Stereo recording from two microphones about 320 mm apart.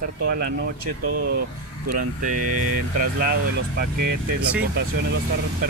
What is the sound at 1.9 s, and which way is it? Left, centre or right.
Speech, right.